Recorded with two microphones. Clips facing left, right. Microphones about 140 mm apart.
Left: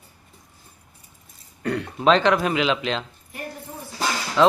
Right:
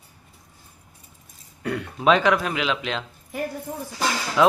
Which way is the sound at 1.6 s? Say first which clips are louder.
Left 2 dB; 5° right (ahead or behind).